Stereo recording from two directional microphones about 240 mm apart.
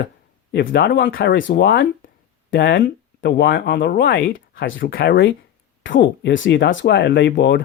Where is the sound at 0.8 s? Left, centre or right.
Left.